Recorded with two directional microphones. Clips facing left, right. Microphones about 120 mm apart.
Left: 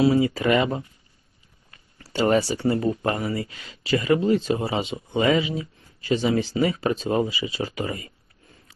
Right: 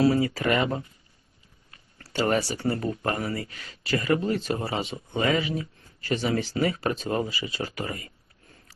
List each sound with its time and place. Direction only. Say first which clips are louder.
0.0 s speech: left 3 dB; 20° left (ahead or behind)
2.0 s speech: left 4 dB; 25° left (ahead or behind)